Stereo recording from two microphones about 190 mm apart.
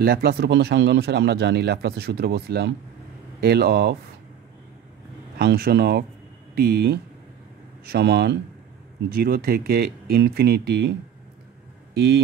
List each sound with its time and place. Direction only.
0.0 s speech: 55° right (ahead or behind)
5.4 s speech: 60° right (ahead or behind)